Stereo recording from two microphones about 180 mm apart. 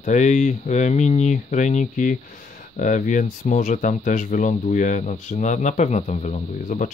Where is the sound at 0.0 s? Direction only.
40° left (ahead or behind).